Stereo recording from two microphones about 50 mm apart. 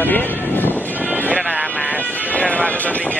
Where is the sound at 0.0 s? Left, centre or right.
Left.